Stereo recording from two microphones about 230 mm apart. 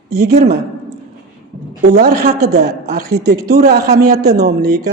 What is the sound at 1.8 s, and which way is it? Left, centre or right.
A woman's voice, right.